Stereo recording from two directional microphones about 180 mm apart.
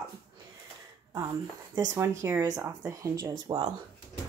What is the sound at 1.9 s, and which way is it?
Speech, 15° right (ahead or behind).